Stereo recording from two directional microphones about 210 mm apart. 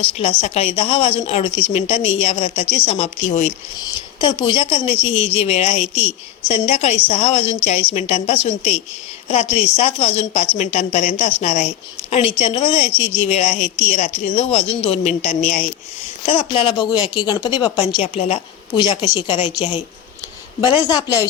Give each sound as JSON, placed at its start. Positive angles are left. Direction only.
{"t": 0.2, "sound": "a woman's voice", "side_deg": 30}
{"t": 3.8, "sound": "a woman's voice", "side_deg": 20}